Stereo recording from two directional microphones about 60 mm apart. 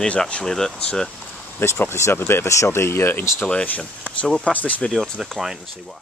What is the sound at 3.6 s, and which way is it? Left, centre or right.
Speech, left.